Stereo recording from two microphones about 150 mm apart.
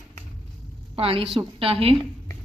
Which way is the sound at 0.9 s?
40° right (ahead or behind).